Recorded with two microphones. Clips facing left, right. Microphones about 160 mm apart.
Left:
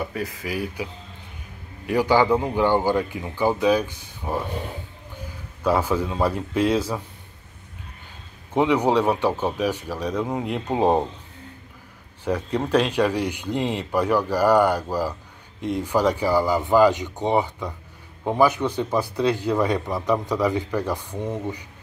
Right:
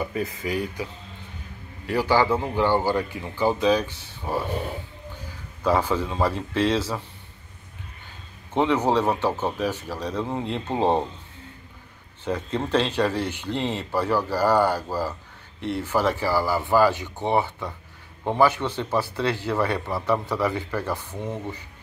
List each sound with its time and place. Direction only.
0.0 s speech: centre (ahead or behind)
1.9 s speech: 15° left (ahead or behind)
5.6 s speech: 10° left (ahead or behind)
8.5 s speech: 10° left (ahead or behind)
12.3 s speech: 10° left (ahead or behind)